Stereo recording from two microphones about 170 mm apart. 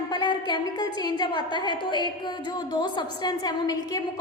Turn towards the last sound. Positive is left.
turn(degrees=25)  # may be behind; listen again after turning